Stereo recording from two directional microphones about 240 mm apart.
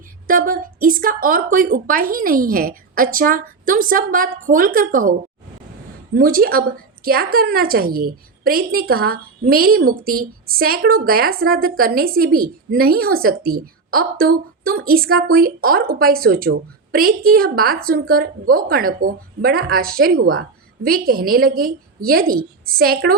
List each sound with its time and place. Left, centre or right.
0.3 s a woman's voice: right
6.1 s a woman's voice: right